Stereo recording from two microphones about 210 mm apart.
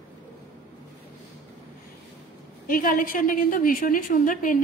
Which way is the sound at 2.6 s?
40° left (ahead or behind).